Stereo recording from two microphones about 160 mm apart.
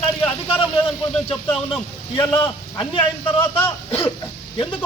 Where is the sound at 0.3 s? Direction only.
35° left (ahead or behind).